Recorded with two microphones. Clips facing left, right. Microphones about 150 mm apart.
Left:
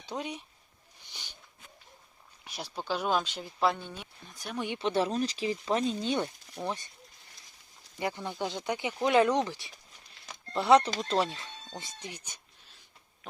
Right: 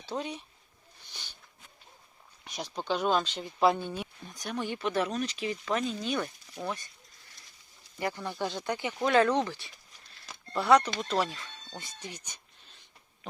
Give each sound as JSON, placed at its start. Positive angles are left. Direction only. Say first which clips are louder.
{"t": 0.0, "sound": "speech", "louder": "right 1 dB", "side_deg": 15}
{"t": 1.1, "sound": "a sound", "louder": "even", "side_deg": 15}
{"t": 2.4, "sound": "speech", "louder": "right 2 dB", "side_deg": 5}
{"t": 3.6, "sound": "speech", "louder": "right 4 dB", "side_deg": -5}
{"t": 4.5, "sound": "speech", "louder": "even", "side_deg": 20}
{"t": 4.9, "sound": "speech", "louder": "left 3 dB", "side_deg": 30}
{"t": 7.9, "sound": "speech", "louder": "even", "side_deg": 20}
{"t": 10.2, "sound": "a sound", "louder": "even", "side_deg": 25}
{"t": 11.1, "sound": "speech", "louder": "left 1 dB", "side_deg": 25}
{"t": 12.0, "sound": "speech", "louder": "even", "side_deg": 10}